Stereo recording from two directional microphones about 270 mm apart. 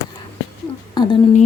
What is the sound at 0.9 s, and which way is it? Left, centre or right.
Speech, centre.